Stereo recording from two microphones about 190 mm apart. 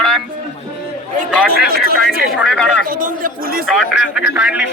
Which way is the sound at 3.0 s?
50° right (ahead or behind).